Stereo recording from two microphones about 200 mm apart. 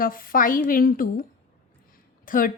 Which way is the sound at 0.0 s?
45° left (ahead or behind).